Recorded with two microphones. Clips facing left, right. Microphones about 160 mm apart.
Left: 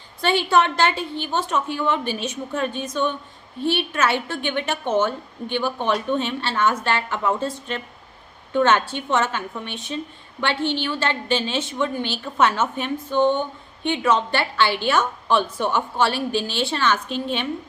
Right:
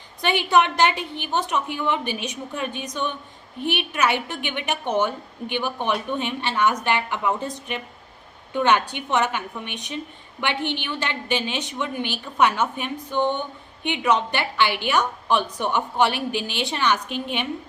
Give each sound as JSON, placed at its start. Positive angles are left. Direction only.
{"t": 0.2, "sound": "a woman's voice", "side_deg": -15}